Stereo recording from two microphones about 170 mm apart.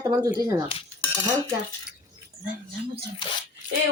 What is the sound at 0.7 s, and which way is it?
Cutlery, 35° left (ahead or behind).